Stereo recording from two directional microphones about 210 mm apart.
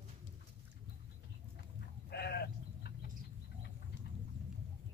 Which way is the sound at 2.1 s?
50° left (ahead or behind).